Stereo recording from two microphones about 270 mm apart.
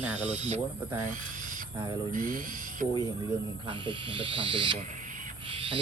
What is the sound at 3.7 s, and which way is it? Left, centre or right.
Speech, centre.